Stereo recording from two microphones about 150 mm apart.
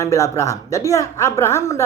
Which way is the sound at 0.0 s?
20° left (ahead or behind).